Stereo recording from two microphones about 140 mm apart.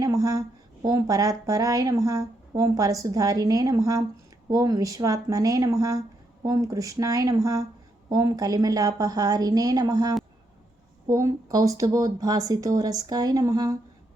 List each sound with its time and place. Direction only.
0.0 s speech: 25° right (ahead or behind)